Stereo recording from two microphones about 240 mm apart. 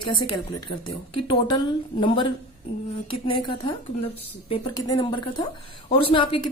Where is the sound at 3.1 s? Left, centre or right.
Left.